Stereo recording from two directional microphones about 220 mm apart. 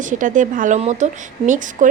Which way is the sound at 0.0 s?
35° right (ahead or behind).